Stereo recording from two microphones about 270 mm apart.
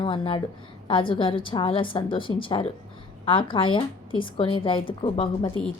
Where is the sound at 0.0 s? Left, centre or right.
Centre.